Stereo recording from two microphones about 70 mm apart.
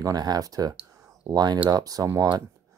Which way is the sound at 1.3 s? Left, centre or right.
Right.